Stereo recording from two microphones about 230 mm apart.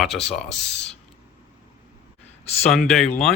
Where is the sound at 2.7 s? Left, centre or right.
Centre.